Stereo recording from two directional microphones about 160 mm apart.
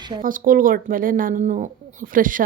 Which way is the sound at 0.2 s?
60° right (ahead or behind).